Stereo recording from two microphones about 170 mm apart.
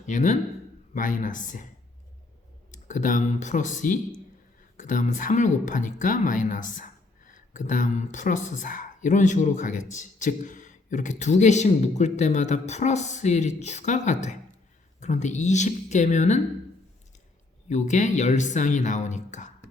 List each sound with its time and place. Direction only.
0.0 s speech: 45° left (ahead or behind)
2.7 s speech: 50° left (ahead or behind)
17.7 s speech: 45° left (ahead or behind)